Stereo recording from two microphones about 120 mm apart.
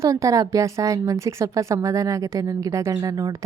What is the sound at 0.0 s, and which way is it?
A woman's voice, 25° right (ahead or behind).